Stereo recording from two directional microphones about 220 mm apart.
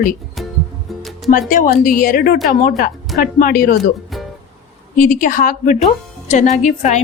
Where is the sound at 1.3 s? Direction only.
40° left (ahead or behind).